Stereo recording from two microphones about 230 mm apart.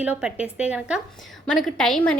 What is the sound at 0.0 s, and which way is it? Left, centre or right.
A woman's voice, centre.